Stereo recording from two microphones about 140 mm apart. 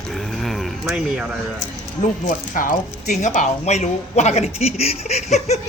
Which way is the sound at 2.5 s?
65° left (ahead or behind).